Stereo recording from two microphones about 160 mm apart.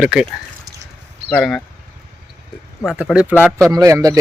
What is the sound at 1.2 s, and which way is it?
Speech, 5° left (ahead or behind).